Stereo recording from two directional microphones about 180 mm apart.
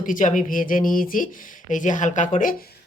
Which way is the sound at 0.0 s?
45° left (ahead or behind).